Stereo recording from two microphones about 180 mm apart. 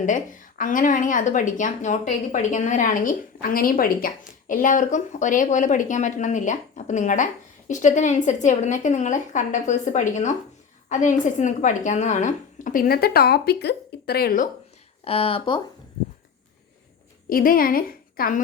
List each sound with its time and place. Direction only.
0.0 s a woman's voice: 45° left (ahead or behind)
15.0 s speech: 30° left (ahead or behind)
17.2 s a woman's voice: 50° left (ahead or behind)